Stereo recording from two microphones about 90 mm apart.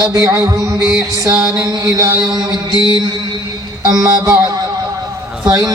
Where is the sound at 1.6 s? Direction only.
45° right (ahead or behind).